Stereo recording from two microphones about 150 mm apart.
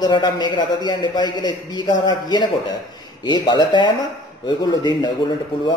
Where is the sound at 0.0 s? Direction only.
30° left (ahead or behind).